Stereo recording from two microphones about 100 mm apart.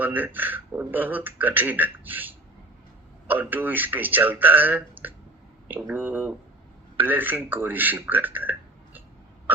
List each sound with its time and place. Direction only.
0.0 s speech: 20° right (ahead or behind)